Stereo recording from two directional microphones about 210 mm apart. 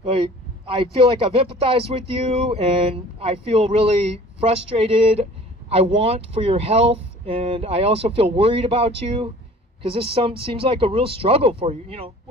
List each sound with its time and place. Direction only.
0.0 s speech: 25° right (ahead or behind)